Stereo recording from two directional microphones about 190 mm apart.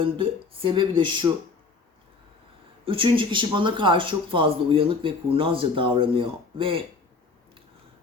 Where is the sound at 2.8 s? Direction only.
25° right (ahead or behind).